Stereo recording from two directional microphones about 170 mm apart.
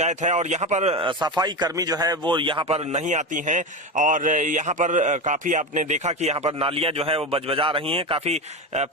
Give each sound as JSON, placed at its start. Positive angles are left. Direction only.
{"t": 0.0, "sound": "a man's voice", "side_deg": -45}